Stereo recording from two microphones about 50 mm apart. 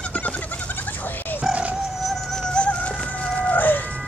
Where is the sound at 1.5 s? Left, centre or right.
Right.